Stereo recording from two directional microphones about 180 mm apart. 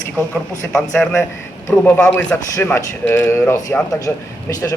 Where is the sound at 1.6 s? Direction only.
10° left (ahead or behind).